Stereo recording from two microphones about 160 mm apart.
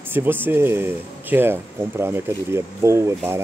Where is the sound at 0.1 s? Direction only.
10° right (ahead or behind).